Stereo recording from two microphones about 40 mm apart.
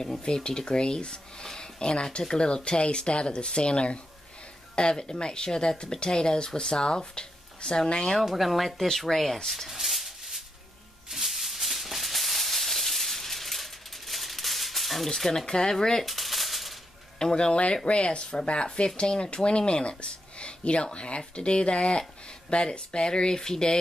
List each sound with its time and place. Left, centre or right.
0.2 s speech: left
8.2 s speech: centre
9.7 s a sound: centre
11.1 s maraca: centre
15.1 s speech: centre
16.1 s a sound: centre
17.2 s speech: centre